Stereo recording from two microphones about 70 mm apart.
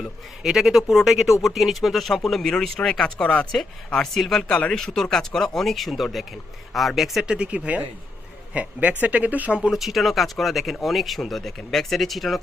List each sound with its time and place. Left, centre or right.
0.0 s speech: centre; by 9.6 s right
9.6 s speech: centre